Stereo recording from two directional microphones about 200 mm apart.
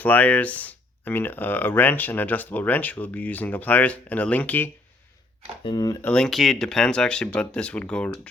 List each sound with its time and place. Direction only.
0.0 s speech: 10° left (ahead or behind)
5.6 s speech: 20° left (ahead or behind)
6.1 s speech: 5° left (ahead or behind)